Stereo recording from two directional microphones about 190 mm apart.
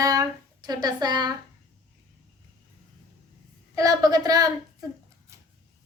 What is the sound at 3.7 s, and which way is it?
A woman's voice, 20° right (ahead or behind).